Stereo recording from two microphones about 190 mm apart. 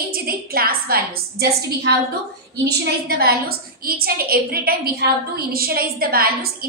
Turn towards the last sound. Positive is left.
turn(degrees=-50)  # may be behind; listen again after turning